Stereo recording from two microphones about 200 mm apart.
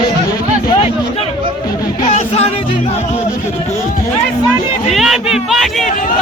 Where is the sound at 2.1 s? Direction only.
30° left (ahead or behind).